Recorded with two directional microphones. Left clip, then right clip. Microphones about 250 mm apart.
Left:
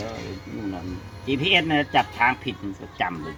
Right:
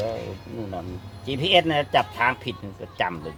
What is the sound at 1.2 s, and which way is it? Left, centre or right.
Speech, right.